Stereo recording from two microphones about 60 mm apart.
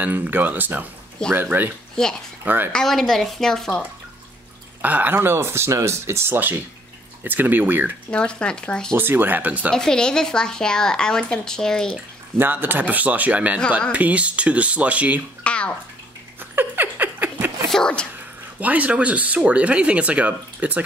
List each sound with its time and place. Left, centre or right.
0.0 s speech: right
2.0 s speech: centre
2.4 s speech: right
2.7 s speech: centre
4.8 s speech: right
8.1 s speech: centre
8.9 s speech: right
9.7 s speech: centre
12.4 s speech: right
15.4 s bathtub: centre
16.3 s a sound: right
17.6 s speech: centre
18.6 s speech: right